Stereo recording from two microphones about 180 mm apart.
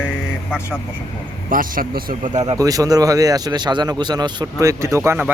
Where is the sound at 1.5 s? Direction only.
50° right (ahead or behind).